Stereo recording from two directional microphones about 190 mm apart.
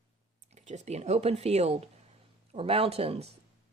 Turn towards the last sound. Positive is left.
turn(degrees=-30)  # may be behind; listen again after turning